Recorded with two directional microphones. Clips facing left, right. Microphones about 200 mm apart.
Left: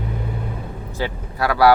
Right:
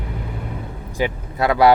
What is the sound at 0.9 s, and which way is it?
Speech, 20° right (ahead or behind).